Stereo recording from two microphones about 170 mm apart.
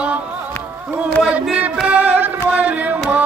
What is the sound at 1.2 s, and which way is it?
Music, 5° right (ahead or behind).